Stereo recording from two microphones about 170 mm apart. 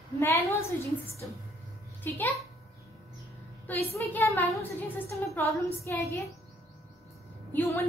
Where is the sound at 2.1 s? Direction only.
10° left (ahead or behind).